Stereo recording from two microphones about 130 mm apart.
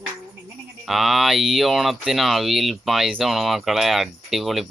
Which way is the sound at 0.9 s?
Centre (ahead or behind).